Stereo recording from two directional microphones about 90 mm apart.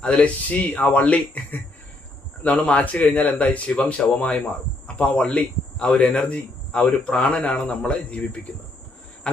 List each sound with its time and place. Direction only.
0.0 s speech: 15° left (ahead or behind)